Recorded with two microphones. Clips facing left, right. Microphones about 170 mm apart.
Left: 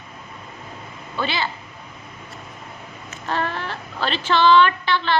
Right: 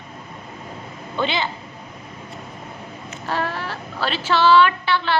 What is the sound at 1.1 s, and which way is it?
Speech, 20° right (ahead or behind).